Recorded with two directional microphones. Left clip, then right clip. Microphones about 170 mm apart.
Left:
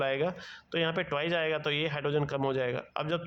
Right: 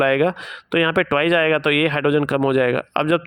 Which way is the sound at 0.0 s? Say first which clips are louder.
Right 13 dB; 40° right (ahead or behind).